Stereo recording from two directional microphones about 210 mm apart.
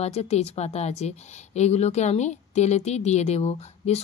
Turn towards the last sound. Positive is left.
turn(degrees=30)  # may be behind; listen again after turning